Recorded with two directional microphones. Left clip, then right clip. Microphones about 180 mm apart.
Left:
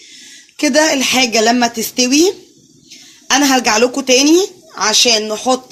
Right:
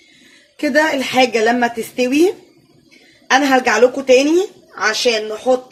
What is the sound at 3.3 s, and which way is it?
Speech, 45° left (ahead or behind).